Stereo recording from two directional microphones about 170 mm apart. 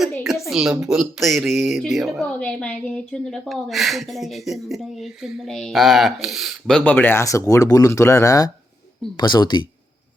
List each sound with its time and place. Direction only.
0.4 s speech: 5° right (ahead or behind); by 9.6 s 25° left (ahead or behind)